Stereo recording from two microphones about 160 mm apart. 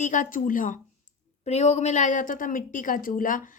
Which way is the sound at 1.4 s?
45° left (ahead or behind).